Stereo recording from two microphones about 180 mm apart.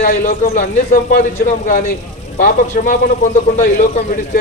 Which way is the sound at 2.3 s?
45° left (ahead or behind).